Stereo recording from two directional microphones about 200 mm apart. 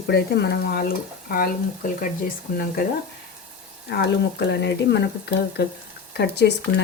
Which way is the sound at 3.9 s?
55° left (ahead or behind).